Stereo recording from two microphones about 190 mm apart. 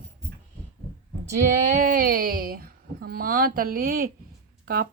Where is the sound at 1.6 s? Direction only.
45° right (ahead or behind).